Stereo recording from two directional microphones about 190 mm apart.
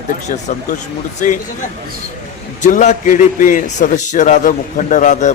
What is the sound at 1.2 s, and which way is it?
Speech, 40° left (ahead or behind).